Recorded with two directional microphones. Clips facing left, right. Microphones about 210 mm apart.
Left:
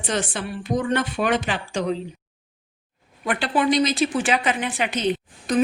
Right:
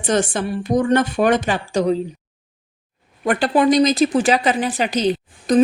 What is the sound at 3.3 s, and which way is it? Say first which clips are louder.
A woman's voice: right 6 dB; 45° right (ahead or behind).